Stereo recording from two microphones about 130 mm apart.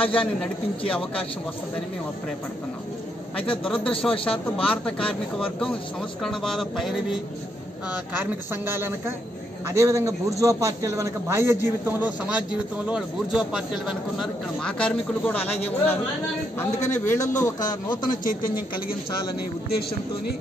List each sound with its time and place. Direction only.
0.0 s a man's voice: 5° left (ahead or behind)
3.3 s a man's voice: 5° left (ahead or behind)
6.2 s a sound: centre (ahead or behind)
7.9 s a man's voice: 15° right (ahead or behind); by 17.9 s 30° left (ahead or behind)
18.2 s speech: 90° left